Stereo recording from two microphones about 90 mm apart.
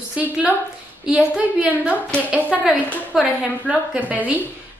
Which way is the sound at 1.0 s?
10° right (ahead or behind).